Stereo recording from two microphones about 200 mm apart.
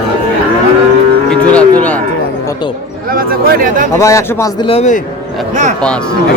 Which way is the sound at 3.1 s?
45° right (ahead or behind).